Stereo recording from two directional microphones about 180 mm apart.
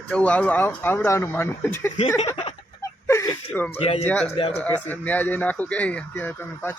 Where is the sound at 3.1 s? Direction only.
15° left (ahead or behind).